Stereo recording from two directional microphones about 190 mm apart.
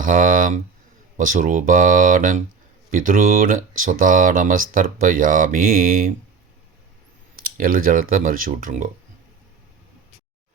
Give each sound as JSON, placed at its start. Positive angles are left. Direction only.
{"t": 0.0, "sound": "speech", "side_deg": -45}
{"t": 7.3, "sound": "speech", "side_deg": -50}